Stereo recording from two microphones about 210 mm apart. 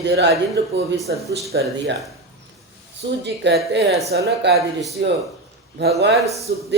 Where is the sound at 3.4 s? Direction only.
55° right (ahead or behind).